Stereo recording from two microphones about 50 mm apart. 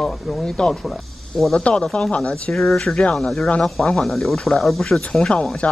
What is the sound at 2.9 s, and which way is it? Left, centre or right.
Speech, left.